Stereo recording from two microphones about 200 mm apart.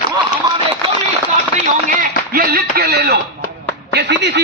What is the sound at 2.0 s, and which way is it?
A man's voice, 50° right (ahead or behind).